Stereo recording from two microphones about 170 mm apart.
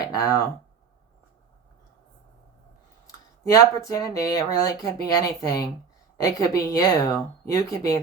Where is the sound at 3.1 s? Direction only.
20° left (ahead or behind).